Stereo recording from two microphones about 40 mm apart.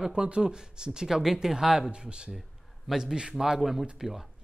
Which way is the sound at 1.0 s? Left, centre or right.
Centre.